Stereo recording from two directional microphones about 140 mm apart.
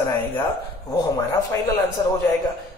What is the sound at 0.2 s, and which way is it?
A man's voice, 25° left (ahead or behind).